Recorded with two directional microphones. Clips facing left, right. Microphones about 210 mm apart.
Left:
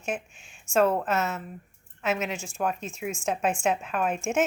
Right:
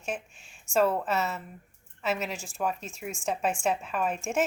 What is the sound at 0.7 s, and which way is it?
A woman's voice, centre (ahead or behind).